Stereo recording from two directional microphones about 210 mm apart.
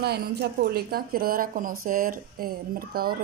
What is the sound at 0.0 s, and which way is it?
Speech, 50° right (ahead or behind).